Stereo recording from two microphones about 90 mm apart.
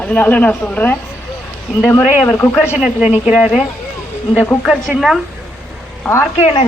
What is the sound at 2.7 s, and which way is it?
Speech, 15° right (ahead or behind).